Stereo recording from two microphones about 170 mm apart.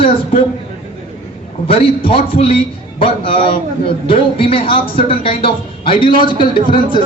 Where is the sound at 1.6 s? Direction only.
35° left (ahead or behind).